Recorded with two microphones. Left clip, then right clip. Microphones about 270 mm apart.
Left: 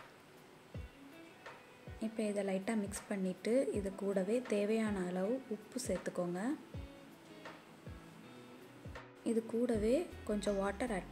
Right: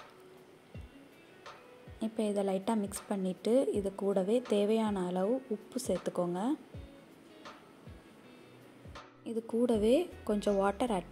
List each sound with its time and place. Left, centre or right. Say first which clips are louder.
2.0 s a woman's voice: right 5 dB; centre
9.2 s speech: right 3 dB; centre